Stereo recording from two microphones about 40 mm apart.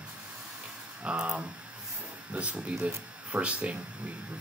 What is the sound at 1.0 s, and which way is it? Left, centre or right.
Speech, right.